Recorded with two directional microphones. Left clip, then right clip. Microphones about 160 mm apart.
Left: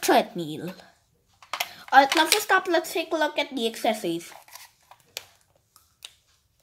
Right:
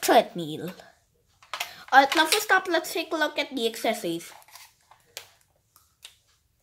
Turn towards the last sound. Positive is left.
turn(degrees=80)